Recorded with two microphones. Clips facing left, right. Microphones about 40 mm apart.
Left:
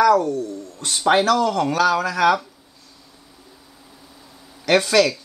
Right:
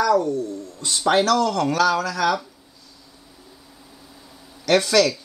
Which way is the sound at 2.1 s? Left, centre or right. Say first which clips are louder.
Left 4 dB; left.